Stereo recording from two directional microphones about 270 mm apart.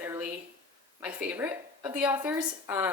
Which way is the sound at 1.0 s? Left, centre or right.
Centre.